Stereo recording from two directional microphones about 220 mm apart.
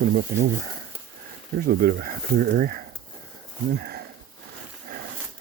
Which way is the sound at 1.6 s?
45° right (ahead or behind).